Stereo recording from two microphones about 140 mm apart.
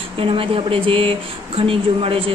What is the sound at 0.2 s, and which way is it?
A woman's voice, 40° right (ahead or behind).